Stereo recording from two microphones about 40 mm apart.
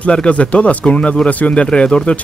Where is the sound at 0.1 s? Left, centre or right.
Left.